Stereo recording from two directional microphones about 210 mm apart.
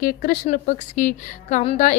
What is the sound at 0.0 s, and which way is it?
A woman's voice, 45° left (ahead or behind).